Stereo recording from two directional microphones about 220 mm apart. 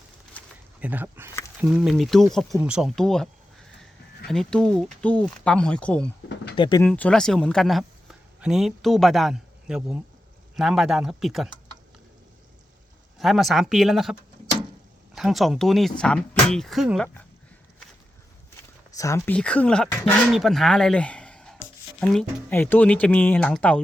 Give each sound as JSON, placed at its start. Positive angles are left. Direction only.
{"t": 0.8, "sound": "speech", "side_deg": -10}
{"t": 4.3, "sound": "speech", "side_deg": 5}
{"t": 6.6, "sound": "speech", "side_deg": 20}
{"t": 6.8, "sound": "speech", "side_deg": 5}
{"t": 13.1, "sound": "speech", "side_deg": 0}
{"t": 18.9, "sound": "speech", "side_deg": 15}